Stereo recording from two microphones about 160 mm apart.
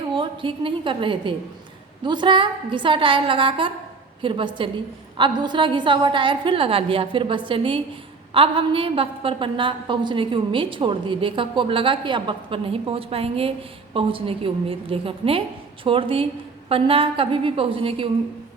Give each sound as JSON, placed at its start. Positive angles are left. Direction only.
{"t": 0.1, "sound": "a woman's voice", "side_deg": -30}